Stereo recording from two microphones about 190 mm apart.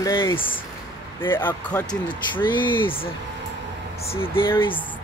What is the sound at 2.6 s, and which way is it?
Speech, 25° left (ahead or behind).